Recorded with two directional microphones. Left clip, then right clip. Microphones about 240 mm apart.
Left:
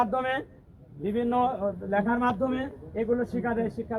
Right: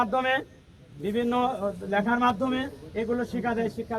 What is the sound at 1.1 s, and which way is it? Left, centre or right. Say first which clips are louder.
A man's voice: even; centre.